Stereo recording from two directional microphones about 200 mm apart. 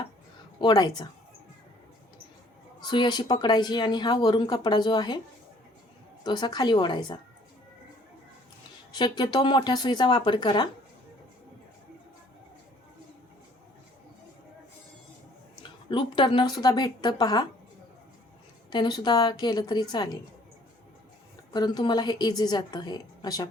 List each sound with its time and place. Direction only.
0.6 s speech: 20° left (ahead or behind)
2.8 s speech: 20° left (ahead or behind)
6.2 s speech: 20° left (ahead or behind)
9.0 s speech: 20° left (ahead or behind)
15.9 s speech: 25° left (ahead or behind)
18.7 s speech: 20° left (ahead or behind)
21.5 s speech: 20° left (ahead or behind)